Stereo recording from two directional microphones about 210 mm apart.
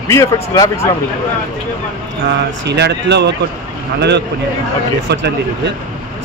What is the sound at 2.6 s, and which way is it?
Speech, 55° right (ahead or behind).